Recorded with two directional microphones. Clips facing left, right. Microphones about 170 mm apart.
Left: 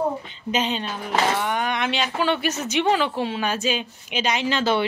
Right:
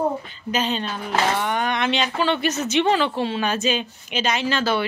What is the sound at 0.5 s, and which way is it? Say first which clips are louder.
A woman's voice: right 1 dB; 15° left (ahead or behind).